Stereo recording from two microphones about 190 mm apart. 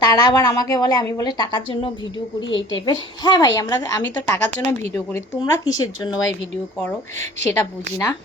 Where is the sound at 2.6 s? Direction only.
90° left.